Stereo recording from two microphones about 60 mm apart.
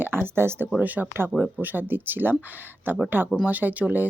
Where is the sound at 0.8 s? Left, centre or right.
Right.